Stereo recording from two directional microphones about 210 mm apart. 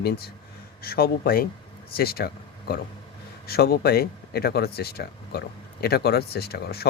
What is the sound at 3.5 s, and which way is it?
Speech, 45° left (ahead or behind).